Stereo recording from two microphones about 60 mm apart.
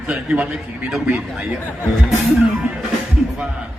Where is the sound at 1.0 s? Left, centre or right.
Right.